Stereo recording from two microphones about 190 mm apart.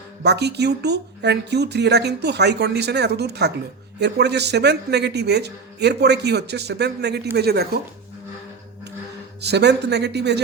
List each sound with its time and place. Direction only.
0.2 s speech: 60° right (ahead or behind)
9.4 s speech: 60° right (ahead or behind)